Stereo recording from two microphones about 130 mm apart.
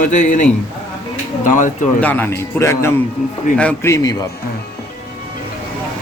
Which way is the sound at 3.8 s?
25° left (ahead or behind).